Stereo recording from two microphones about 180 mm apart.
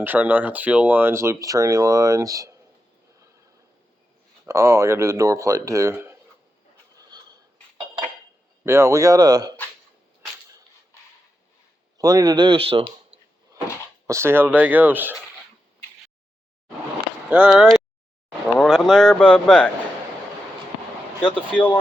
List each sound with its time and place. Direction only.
0.0 s speech: 10° right (ahead or behind)
4.4 s speech: 15° right (ahead or behind)
8.6 s speech: 15° right (ahead or behind)
11.9 s speech: 20° right (ahead or behind)
14.1 s speech: 15° right (ahead or behind)
17.2 s speech: 10° right (ahead or behind)